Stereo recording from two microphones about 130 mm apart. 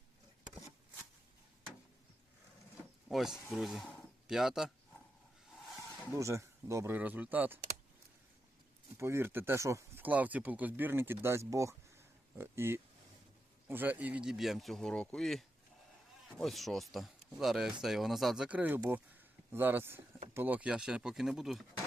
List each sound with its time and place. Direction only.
3.1 s speech: centre (ahead or behind)
6.1 s speech: 25° right (ahead or behind)
9.0 s speech: 20° right (ahead or behind); by 21.6 s 5° right (ahead or behind)